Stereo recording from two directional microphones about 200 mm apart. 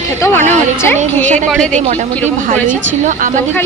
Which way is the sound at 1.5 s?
5° left (ahead or behind).